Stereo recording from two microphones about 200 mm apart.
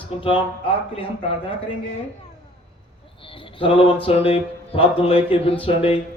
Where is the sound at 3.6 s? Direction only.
25° left (ahead or behind).